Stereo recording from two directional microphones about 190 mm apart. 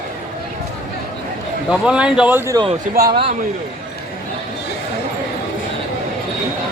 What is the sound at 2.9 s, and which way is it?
Speech, 55° right (ahead or behind).